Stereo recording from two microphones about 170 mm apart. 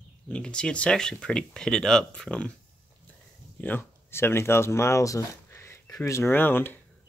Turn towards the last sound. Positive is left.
turn(degrees=10)  # may be behind; listen again after turning